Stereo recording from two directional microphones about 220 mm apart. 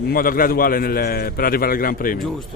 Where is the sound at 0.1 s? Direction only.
40° left (ahead or behind).